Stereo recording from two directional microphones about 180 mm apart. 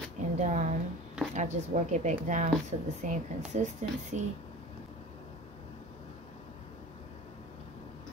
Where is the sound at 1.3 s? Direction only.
40° right (ahead or behind).